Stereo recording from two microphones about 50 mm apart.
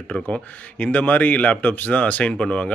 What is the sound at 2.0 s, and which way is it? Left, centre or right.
Speech, left.